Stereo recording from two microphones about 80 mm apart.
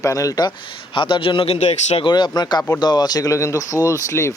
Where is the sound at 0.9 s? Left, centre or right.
Left.